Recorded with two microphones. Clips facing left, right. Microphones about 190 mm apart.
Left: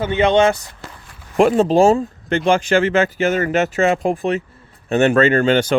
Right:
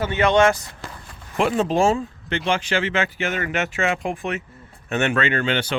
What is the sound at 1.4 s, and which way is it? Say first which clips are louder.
Speech: left 7 dB; 40° left (ahead or behind).